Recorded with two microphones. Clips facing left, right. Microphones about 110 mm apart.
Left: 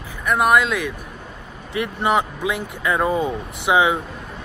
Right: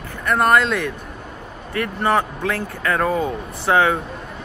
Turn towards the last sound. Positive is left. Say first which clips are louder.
# even
turn(degrees=15)  # may be behind; listen again after turning